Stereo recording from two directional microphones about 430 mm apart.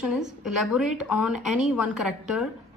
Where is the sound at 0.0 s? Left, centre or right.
Centre.